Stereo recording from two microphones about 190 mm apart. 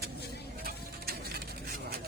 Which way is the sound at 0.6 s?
50° right (ahead or behind).